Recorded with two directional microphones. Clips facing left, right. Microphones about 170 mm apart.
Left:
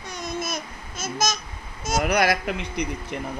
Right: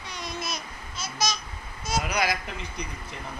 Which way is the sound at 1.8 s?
45° left (ahead or behind).